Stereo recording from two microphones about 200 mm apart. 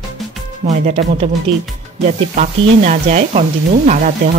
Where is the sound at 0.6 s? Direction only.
35° right (ahead or behind).